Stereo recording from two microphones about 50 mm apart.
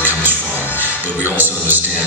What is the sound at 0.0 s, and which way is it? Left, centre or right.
Music, right.